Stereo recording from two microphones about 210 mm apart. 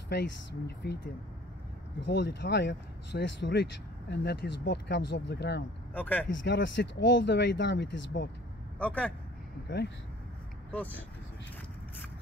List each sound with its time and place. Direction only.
0.1 s speech: 55° left (ahead or behind)
2.0 s speech: 55° left (ahead or behind)
5.9 s speech: 10° left (ahead or behind)
6.2 s speech: 60° left (ahead or behind)
8.7 s a man's voice: 5° left (ahead or behind)
10.7 s speech: 5° left (ahead or behind)